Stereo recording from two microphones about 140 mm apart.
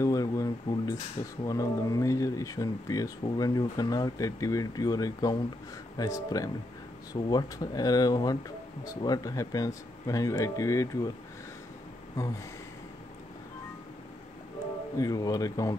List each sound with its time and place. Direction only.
0.0 s a sound: 25° left (ahead or behind)
1.4 s speech: 25° left (ahead or behind)
15.0 s speech: 25° left (ahead or behind)